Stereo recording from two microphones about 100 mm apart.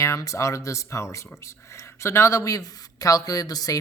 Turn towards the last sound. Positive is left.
turn(degrees=40)  # may be behind; listen again after turning